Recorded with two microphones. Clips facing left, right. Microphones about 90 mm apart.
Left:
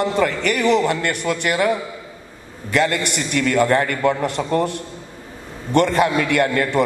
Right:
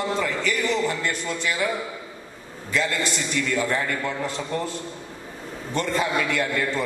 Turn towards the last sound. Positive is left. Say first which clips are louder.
# left 6 dB
turn(degrees=60)  # may be behind; listen again after turning